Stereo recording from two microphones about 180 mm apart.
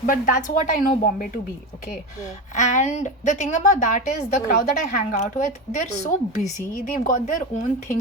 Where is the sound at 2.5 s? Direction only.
45° left (ahead or behind).